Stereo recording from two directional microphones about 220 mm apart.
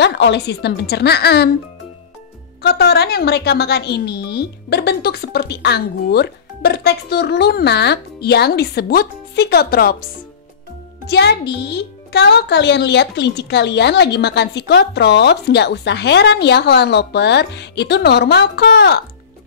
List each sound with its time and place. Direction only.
0.0 s a child's voice: 50° left (ahead or behind)
2.6 s a child's voice: 45° left (ahead or behind)
11.1 s a child's voice: 50° left (ahead or behind)